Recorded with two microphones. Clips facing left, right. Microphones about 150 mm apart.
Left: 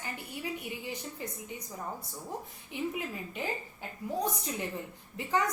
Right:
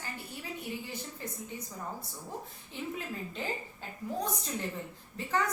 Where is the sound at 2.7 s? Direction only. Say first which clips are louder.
Left 5 dB; 15° left (ahead or behind).